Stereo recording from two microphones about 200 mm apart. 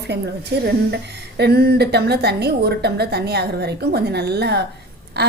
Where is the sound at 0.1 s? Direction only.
55° right (ahead or behind).